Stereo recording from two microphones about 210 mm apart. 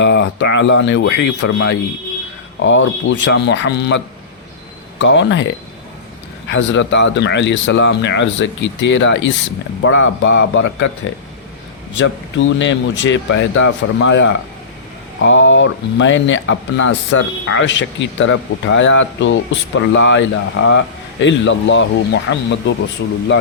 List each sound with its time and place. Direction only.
0.0 s speech: 60° left (ahead or behind)
6.5 s speech: 60° left (ahead or behind)
11.9 s speech: 65° left (ahead or behind)